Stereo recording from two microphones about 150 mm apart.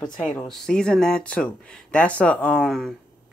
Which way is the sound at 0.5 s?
5° left (ahead or behind).